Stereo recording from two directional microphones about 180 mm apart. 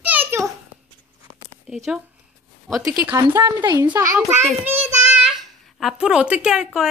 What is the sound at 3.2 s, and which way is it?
Speech, 15° right (ahead or behind).